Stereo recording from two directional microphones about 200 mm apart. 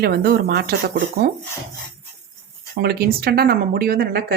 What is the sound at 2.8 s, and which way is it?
Speech, 50° right (ahead or behind).